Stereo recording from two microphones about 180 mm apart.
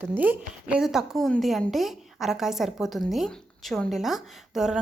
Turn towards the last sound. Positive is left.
turn(degrees=0)  # may be behind; listen again after turning